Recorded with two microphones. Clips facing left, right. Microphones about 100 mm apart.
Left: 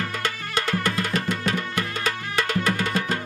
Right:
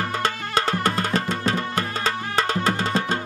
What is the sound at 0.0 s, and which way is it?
Music, 35° right (ahead or behind).